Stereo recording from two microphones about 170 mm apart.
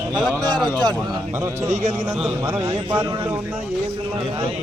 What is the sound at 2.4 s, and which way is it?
A man's voice, 15° right (ahead or behind).